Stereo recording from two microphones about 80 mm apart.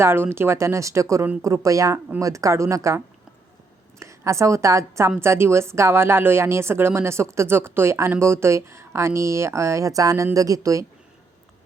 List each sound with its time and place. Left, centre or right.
0.0 s speech: right
4.0 s speech: right